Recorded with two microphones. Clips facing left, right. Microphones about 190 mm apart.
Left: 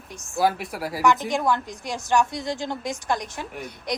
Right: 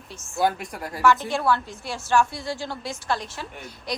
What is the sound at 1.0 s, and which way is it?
A woman's voice, 15° left (ahead or behind).